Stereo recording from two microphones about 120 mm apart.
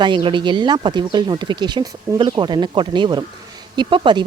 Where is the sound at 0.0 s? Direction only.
40° right (ahead or behind).